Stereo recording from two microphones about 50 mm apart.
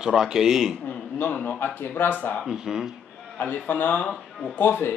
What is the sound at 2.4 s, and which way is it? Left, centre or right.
Speech, centre.